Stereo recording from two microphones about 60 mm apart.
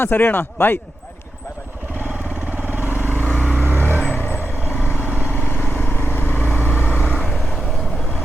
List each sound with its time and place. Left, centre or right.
0.0 s speech: left
2.6 s vehicle: right
4.8 s vehicle: left
5.0 s vehicle: right
5.5 s vehicle: left
6.4 s vehicle: right
7.0 s vehicle: centre